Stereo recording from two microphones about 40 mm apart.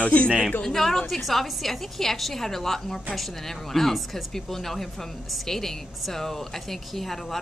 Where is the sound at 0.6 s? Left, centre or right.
Centre.